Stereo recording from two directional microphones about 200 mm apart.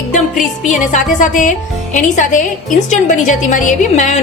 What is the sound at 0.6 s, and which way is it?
A woman's voice, 40° left (ahead or behind).